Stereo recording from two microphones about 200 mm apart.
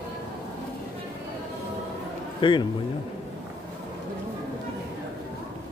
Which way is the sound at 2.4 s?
25° left (ahead or behind).